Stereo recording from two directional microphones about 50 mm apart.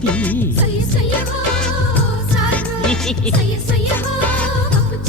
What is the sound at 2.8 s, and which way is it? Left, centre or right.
Music, centre.